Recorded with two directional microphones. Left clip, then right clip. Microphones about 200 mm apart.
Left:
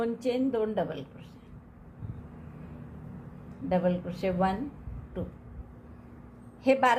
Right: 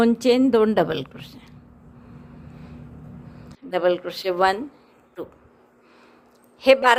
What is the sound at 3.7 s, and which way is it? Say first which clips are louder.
Speech: right 8 dB; 45° right (ahead or behind).